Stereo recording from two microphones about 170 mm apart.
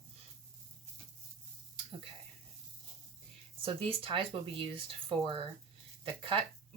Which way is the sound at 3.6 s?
35° right (ahead or behind).